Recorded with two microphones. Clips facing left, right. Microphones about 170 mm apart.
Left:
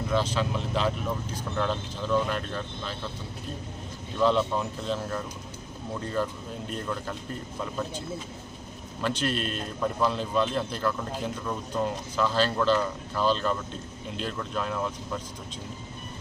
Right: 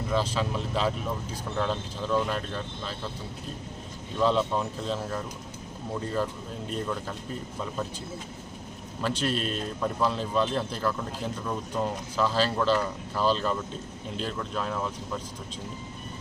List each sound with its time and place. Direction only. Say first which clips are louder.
0.1 s a man's voice: left 1 dB; centre (ahead or behind)
4.2 s a man's voice: left 1 dB; centre (ahead or behind)
9.0 s a man's voice: even; centre (ahead or behind)
12.1 s a man's voice: even; 5° right (ahead or behind)